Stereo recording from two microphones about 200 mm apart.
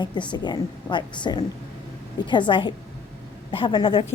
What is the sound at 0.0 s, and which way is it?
A woman's voice, 20° left (ahead or behind).